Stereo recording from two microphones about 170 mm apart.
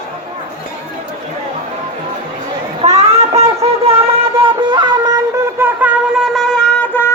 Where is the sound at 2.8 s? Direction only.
40° right (ahead or behind).